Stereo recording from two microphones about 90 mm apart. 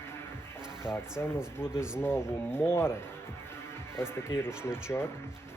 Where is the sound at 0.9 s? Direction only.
70° left (ahead or behind).